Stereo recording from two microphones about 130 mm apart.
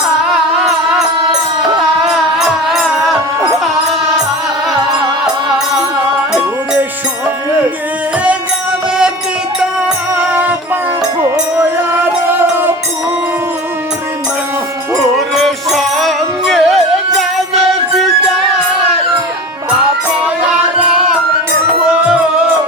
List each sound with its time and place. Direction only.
2.4 s music: centre (ahead or behind)
10.2 s music: 10° right (ahead or behind)
12.4 s music: 15° right (ahead or behind)
15.4 s music: centre (ahead or behind)